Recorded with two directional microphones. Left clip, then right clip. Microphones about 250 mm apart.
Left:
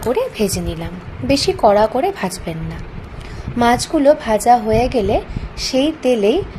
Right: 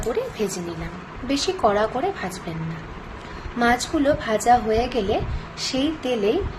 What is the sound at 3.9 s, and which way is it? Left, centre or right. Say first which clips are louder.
A woman's voice: left 8 dB; left.